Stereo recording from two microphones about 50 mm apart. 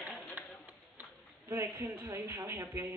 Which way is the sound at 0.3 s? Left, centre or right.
Right.